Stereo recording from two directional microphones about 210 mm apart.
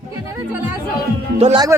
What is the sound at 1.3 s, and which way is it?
Speech, 30° right (ahead or behind).